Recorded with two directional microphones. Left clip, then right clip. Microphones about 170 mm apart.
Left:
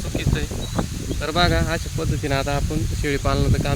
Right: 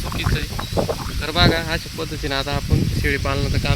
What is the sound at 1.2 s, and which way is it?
Speech, 20° left (ahead or behind).